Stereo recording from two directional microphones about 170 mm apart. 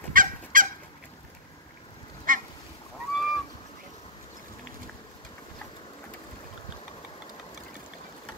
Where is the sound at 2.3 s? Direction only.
55° right (ahead or behind).